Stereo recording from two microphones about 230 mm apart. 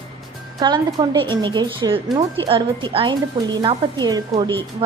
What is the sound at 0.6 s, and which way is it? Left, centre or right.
A woman's voice, centre.